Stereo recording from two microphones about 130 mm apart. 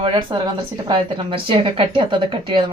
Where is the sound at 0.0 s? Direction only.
40° right (ahead or behind).